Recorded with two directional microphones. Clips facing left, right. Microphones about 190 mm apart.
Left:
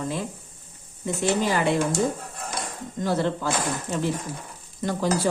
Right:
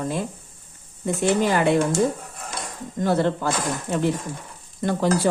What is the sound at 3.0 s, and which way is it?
Speech, 55° right (ahead or behind).